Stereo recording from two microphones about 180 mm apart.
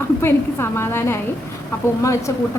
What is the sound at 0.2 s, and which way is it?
A woman's voice, 15° left (ahead or behind).